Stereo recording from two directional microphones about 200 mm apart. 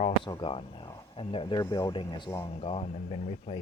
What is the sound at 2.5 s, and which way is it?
Speech, 30° left (ahead or behind).